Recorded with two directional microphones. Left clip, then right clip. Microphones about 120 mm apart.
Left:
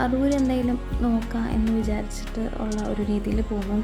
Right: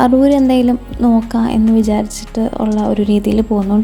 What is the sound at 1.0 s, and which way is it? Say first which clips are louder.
Speech: right 13 dB; 60° right (ahead or behind).